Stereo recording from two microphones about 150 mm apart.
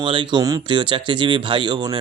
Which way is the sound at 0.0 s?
35° right (ahead or behind).